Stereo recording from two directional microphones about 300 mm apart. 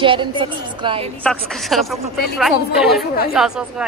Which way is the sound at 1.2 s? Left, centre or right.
Centre.